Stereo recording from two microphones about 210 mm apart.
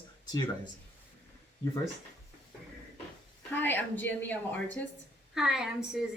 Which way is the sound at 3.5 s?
10° left (ahead or behind).